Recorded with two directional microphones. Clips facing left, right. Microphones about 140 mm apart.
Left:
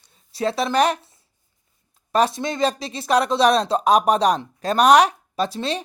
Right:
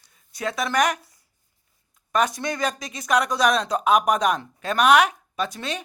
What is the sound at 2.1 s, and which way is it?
A woman's voice, 30° left (ahead or behind).